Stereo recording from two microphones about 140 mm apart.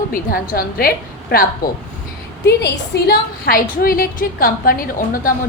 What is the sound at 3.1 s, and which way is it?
A woman's voice, 90° left.